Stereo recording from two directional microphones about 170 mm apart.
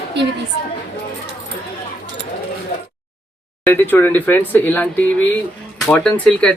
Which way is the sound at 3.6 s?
10° left (ahead or behind).